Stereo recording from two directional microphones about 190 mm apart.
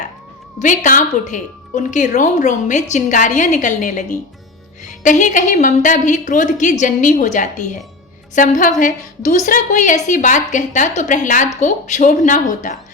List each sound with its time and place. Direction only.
0.6 s a woman's voice: 40° left (ahead or behind)